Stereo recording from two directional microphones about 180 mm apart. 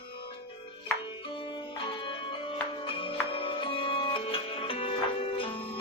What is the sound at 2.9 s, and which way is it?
Music, 30° left (ahead or behind).